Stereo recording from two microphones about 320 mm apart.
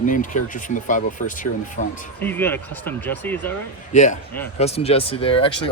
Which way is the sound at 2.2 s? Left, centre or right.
Centre.